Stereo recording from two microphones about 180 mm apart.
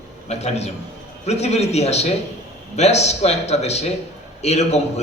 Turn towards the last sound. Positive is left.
turn(degrees=35)  # may be behind; listen again after turning